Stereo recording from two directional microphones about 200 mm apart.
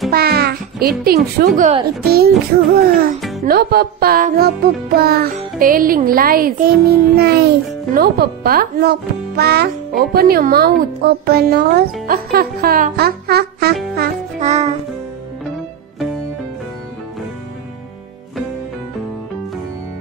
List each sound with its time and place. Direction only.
0.1 s music: 50° right (ahead or behind)
1.6 s a child's voice: 30° right (ahead or behind)
2.0 s a child's voice: 50° right (ahead or behind)
3.2 s music: centre (ahead or behind)
3.4 s a child's voice: 50° right (ahead or behind)
14.4 s music: 35° right (ahead or behind)